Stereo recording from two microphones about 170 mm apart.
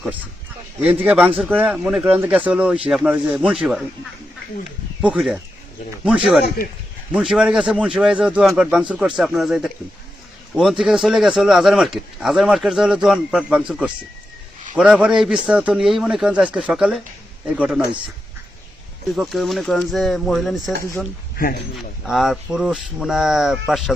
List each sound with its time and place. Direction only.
0.8 s speech: 10° right (ahead or behind)
4.9 s speech: 5° right (ahead or behind)
19.0 s speech: centre (ahead or behind)
21.4 s speech: 55° left (ahead or behind)
22.0 s speech: centre (ahead or behind)